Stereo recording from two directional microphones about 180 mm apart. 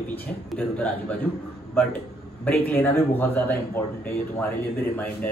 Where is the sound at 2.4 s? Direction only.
10° left (ahead or behind).